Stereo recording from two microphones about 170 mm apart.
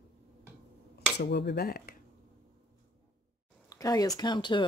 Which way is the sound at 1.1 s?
80° left.